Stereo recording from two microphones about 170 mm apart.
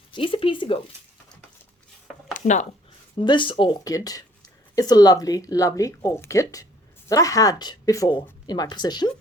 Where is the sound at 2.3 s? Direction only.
45° left (ahead or behind).